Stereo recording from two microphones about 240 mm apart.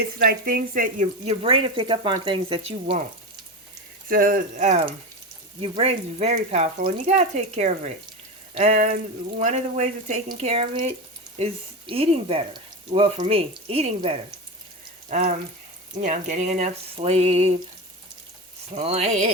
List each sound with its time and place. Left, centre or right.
0.2 s speech: right
4.1 s speech: right
18.7 s speech: right